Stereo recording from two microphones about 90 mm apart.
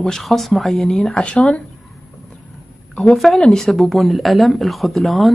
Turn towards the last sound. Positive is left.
turn(degrees=0)  # may be behind; listen again after turning